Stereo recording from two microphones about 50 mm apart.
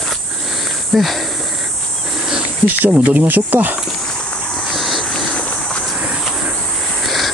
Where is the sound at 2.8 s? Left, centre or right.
Right.